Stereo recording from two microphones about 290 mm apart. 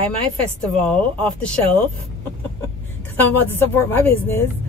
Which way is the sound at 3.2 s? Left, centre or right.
Centre.